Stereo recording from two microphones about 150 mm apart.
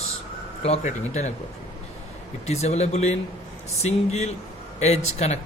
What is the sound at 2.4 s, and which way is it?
Speech, 45° left (ahead or behind).